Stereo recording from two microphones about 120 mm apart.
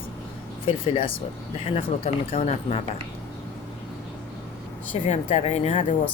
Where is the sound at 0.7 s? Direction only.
50° left (ahead or behind).